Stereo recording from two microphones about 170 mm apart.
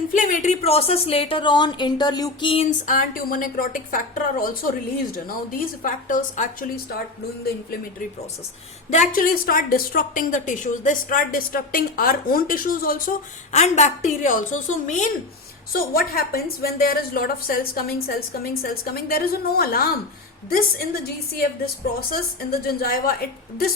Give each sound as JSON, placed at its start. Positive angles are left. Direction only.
{"t": 0.1, "sound": "a woman's voice", "side_deg": 50}
{"t": 2.6, "sound": "a woman's voice", "side_deg": 50}
{"t": 8.9, "sound": "a woman's voice", "side_deg": 50}
{"t": 13.5, "sound": "a woman's voice", "side_deg": 40}
{"t": 15.7, "sound": "a woman's voice", "side_deg": 60}
{"t": 22.6, "sound": "a woman's voice", "side_deg": 60}